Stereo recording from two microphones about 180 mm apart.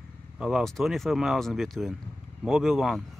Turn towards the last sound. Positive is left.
turn(degrees=0)  # may be behind; listen again after turning